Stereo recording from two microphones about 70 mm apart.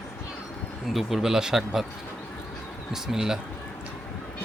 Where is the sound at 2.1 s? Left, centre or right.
Left.